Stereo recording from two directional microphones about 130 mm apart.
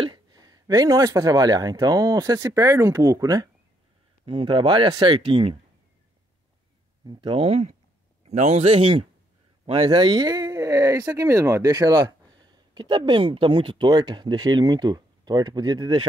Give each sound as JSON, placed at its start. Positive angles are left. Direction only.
{"t": 0.0, "sound": "speech", "side_deg": -30}
{"t": 4.3, "sound": "speech", "side_deg": -40}
{"t": 7.1, "sound": "a man's voice", "side_deg": -40}